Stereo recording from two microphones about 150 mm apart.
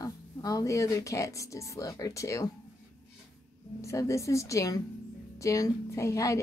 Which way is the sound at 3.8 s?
20° left (ahead or behind).